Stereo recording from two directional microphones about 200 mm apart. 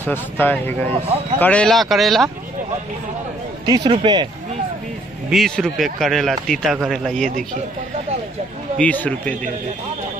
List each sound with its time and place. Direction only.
0.0 s speech: 10° left (ahead or behind)
3.6 s speech: 20° right (ahead or behind)
5.3 s speech: centre (ahead or behind)
8.7 s speech: 5° left (ahead or behind)